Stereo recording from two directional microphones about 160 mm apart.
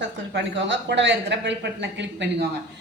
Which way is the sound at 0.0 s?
90° right.